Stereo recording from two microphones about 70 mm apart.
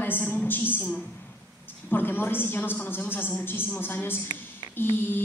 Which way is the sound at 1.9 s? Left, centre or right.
Left.